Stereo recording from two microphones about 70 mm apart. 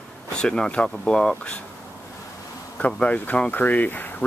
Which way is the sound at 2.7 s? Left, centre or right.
Centre.